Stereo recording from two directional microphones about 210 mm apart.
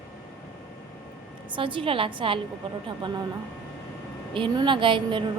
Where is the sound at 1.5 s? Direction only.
25° right (ahead or behind).